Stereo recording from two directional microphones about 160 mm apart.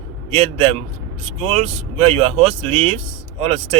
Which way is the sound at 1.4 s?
35° right (ahead or behind).